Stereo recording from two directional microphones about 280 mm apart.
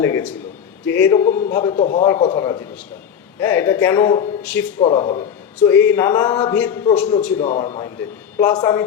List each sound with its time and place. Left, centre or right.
0.0 s a man's voice: centre
1.7 s a man's voice: left
5.6 s a man's voice: centre